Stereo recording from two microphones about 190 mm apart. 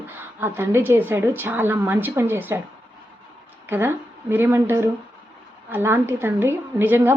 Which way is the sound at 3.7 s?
10° right (ahead or behind).